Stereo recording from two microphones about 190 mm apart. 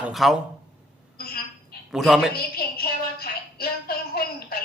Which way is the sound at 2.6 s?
55° left (ahead or behind).